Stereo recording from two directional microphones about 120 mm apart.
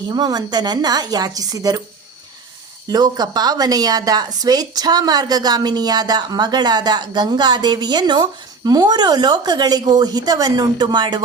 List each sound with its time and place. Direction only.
0.1 s a woman's voice: 35° right (ahead or behind)
2.9 s a woman's voice: 35° right (ahead or behind)